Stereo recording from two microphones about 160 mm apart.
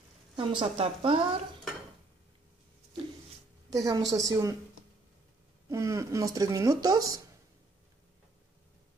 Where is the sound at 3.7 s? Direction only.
20° right (ahead or behind).